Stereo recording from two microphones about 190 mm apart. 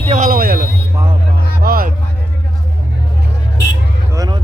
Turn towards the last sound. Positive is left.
turn(degrees=-20)  # may be behind; listen again after turning